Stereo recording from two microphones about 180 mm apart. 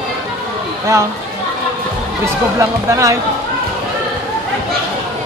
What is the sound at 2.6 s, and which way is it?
Speech, 15° right (ahead or behind).